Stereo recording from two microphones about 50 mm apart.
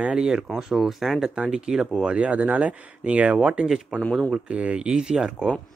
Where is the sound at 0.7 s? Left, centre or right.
Centre.